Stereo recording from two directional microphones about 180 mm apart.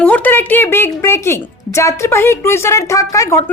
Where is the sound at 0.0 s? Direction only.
10° left (ahead or behind).